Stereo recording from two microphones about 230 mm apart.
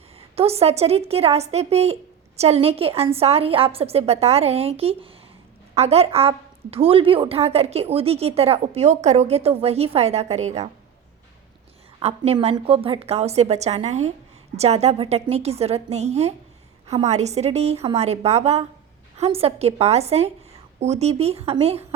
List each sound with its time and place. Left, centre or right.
0.2 s a woman's voice: right
11.9 s a woman's voice: right